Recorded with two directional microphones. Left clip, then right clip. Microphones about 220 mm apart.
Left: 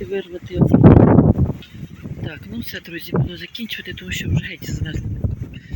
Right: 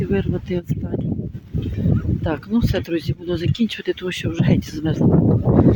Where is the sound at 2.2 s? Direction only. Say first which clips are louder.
Right 9 dB; 5° right (ahead or behind).